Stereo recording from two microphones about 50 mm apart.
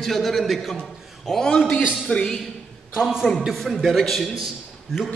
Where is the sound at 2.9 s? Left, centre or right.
Centre.